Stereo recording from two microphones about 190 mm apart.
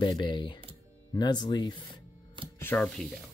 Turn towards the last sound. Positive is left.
turn(degrees=5)  # may be behind; listen again after turning